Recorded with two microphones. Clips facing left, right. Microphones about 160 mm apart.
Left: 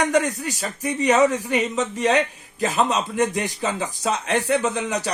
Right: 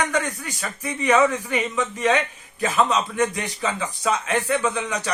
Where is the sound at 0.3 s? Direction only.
35° left (ahead or behind).